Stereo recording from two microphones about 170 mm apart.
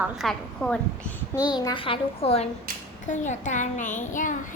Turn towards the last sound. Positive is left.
turn(degrees=50)  # may be behind; listen again after turning